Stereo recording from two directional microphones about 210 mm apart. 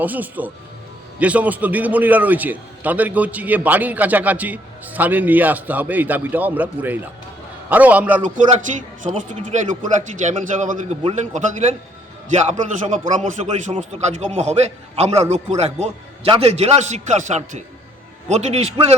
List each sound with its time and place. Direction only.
0.0 s a man's voice: 10° right (ahead or behind)
9.3 s a man's voice: 35° right (ahead or behind)